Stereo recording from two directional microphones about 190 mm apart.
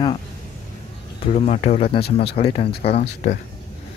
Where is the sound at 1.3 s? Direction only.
35° left (ahead or behind).